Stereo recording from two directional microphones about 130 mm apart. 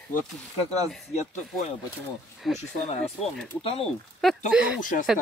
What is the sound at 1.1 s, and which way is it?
Speech, 55° left (ahead or behind).